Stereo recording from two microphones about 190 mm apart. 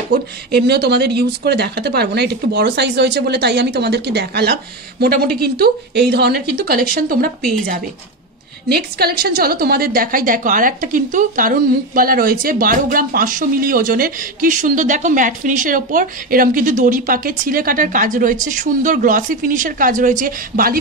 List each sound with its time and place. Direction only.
0.1 s a woman's voice: 60° right (ahead or behind)